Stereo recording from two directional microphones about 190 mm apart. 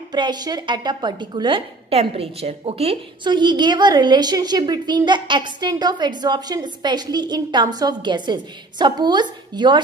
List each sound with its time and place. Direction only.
0.1 s a woman's voice: 20° right (ahead or behind)